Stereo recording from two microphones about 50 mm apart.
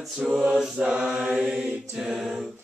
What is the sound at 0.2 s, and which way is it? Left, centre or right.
Mantra, centre.